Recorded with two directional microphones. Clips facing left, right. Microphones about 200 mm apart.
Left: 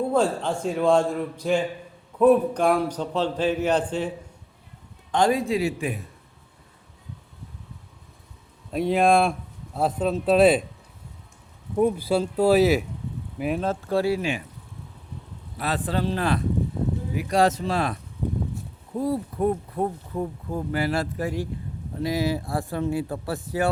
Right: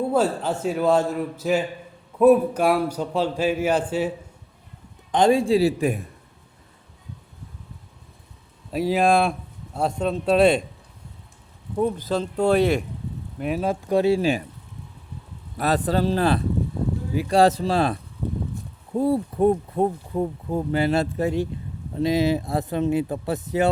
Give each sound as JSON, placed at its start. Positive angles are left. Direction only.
{"t": 0.1, "sound": "a man's voice", "side_deg": -5}
{"t": 5.1, "sound": "speech", "side_deg": -25}
{"t": 8.7, "sound": "a man's voice", "side_deg": 0}
{"t": 11.8, "sound": "a man's voice", "side_deg": 10}
{"t": 13.7, "sound": "speech", "side_deg": -15}
{"t": 15.5, "sound": "speech", "side_deg": -40}
{"t": 18.9, "sound": "speech", "side_deg": -30}